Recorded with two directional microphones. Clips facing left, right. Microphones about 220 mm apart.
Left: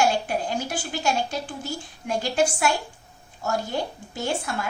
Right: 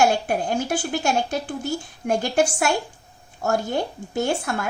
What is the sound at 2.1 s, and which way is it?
Speech, 50° right (ahead or behind).